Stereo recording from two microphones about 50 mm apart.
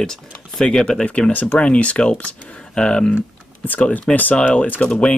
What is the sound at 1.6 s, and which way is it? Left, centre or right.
Speech, left.